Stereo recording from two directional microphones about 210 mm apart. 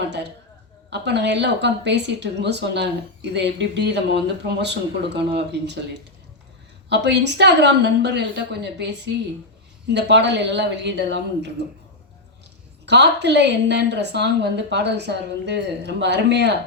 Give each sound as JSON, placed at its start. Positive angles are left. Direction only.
{"t": 0.9, "sound": "a woman's voice", "side_deg": -55}
{"t": 6.9, "sound": "a woman's voice", "side_deg": -55}
{"t": 12.8, "sound": "a woman's voice", "side_deg": -55}